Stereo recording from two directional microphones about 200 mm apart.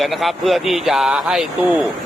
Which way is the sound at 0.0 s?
Centre (ahead or behind).